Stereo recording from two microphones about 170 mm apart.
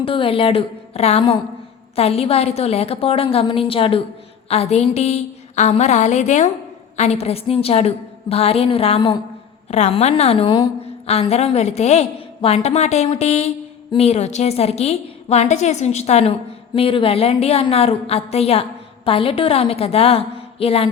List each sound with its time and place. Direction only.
0.0 s a woman's voice: 30° left (ahead or behind)